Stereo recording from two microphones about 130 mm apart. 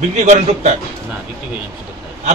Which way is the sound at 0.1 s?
65° right (ahead or behind).